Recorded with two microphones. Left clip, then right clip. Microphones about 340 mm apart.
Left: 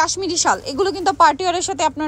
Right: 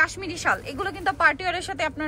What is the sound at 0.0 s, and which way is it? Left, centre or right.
Speech, centre.